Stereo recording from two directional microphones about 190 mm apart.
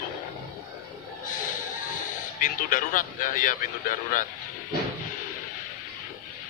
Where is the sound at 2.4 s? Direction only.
45° left (ahead or behind).